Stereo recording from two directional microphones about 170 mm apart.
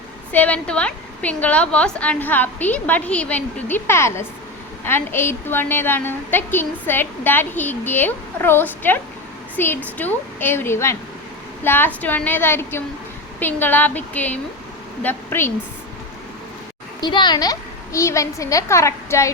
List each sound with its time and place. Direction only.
0.3 s a woman's voice: 10° left (ahead or behind)
17.0 s a woman's voice: 25° left (ahead or behind)